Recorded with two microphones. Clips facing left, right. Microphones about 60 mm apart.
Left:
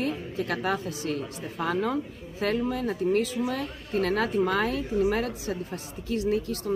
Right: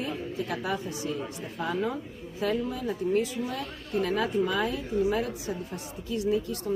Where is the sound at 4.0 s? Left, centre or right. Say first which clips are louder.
Left 2 dB; left.